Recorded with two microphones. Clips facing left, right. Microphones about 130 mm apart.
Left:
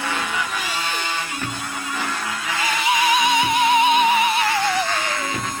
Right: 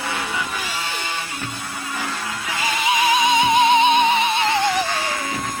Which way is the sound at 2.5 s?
20° right (ahead or behind).